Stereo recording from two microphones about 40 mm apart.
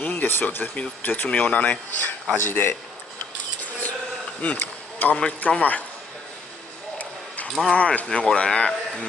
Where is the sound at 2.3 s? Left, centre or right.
Left.